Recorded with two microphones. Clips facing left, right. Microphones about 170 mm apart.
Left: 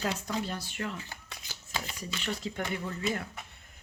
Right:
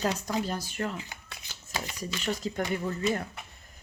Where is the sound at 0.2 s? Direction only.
40° right (ahead or behind).